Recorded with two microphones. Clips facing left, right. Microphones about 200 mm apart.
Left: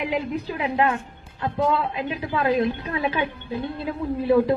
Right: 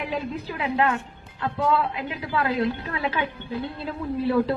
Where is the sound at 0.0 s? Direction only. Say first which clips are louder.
Left 3 dB; 15° left (ahead or behind).